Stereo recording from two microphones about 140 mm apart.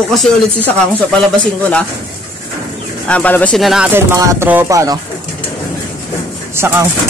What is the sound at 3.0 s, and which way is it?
Speech, 10° left (ahead or behind).